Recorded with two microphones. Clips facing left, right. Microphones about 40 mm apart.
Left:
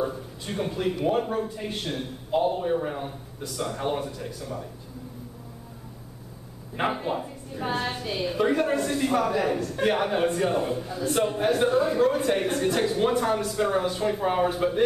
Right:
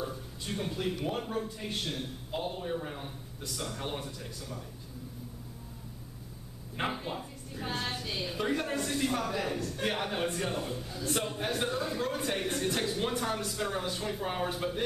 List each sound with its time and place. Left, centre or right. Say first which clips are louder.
0.0 s a woman's voice: left 8 dB; left
6.9 s a woman's voice: left 8 dB; centre
10.5 s a man's voice: left 9 dB; left
12.0 s a woman's voice: left 10 dB; centre